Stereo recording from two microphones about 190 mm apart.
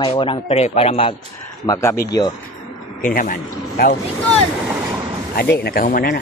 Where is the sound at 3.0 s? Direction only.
45° left (ahead or behind).